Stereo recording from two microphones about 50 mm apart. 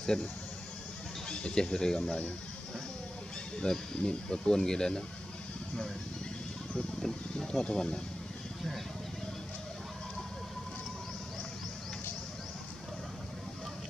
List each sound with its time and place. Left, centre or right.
0.0 s speech: centre
1.3 s speech: centre
3.6 s speech: centre
7.0 s speech: centre